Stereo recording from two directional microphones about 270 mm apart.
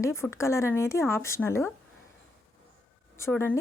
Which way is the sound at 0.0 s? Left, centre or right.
Centre.